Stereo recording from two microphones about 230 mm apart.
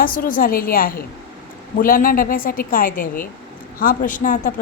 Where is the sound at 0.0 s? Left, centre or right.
Left.